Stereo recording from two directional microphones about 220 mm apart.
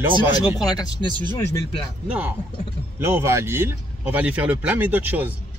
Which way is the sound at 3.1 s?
10° right (ahead or behind).